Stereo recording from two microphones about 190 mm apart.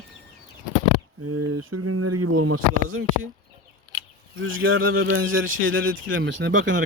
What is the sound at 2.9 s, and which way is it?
Speech, 90° right.